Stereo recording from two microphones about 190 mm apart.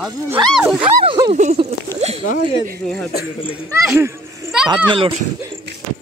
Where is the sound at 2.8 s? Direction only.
5° left (ahead or behind).